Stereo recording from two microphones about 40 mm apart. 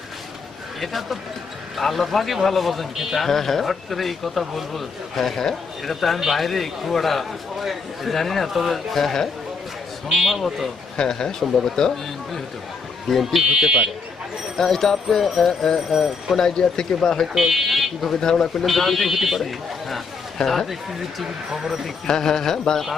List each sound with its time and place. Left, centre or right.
0.8 s a man's voice: centre
10.1 s a man's voice: centre
10.9 s speech: centre
13.3 s speech: centre
14.5 s speech: centre
17.3 s a man's voice: centre
18.2 s speech: centre
18.6 s a man's voice: centre
20.7 s speech: centre
22.0 s speech: centre